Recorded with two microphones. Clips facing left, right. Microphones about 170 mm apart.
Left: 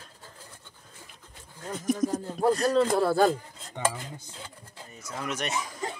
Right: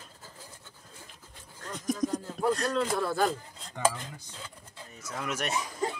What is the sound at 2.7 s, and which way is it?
Speech, 35° left (ahead or behind).